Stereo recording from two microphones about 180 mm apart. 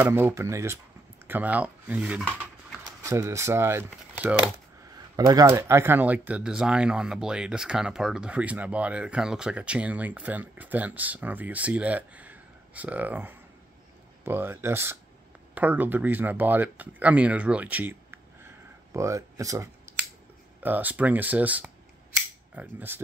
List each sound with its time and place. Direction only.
0.0 s speech: 15° right (ahead or behind)
4.9 s speech: 20° right (ahead or behind)